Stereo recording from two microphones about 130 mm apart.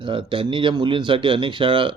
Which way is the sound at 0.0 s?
40° right (ahead or behind).